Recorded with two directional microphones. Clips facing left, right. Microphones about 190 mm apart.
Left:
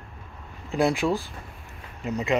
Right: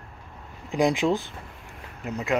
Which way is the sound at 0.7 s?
15° right (ahead or behind).